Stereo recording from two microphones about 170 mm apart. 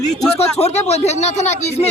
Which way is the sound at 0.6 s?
40° left (ahead or behind).